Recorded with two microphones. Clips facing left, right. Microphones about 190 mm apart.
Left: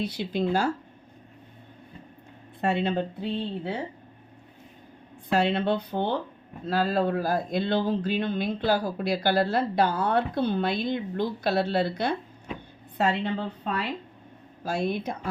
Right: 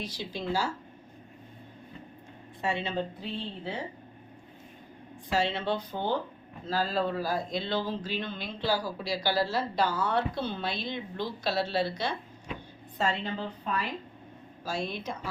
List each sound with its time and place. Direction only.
0.0 s speech: 60° left (ahead or behind)
2.6 s speech: 60° left (ahead or behind)
5.3 s speech: 55° left (ahead or behind)
14.6 s speech: 55° left (ahead or behind)